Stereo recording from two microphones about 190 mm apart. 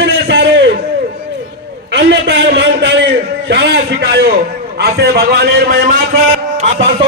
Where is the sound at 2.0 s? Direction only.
65° right (ahead or behind).